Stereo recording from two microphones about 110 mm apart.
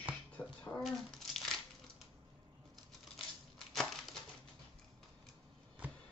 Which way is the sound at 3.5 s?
5° left (ahead or behind).